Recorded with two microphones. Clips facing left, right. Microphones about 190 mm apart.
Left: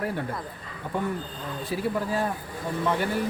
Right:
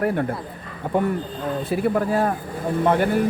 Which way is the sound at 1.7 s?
60° right (ahead or behind).